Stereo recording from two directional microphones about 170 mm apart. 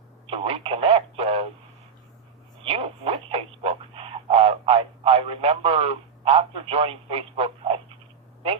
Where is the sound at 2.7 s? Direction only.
35° right (ahead or behind).